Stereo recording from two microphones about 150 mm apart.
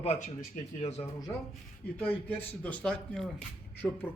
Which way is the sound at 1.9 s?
10° left (ahead or behind).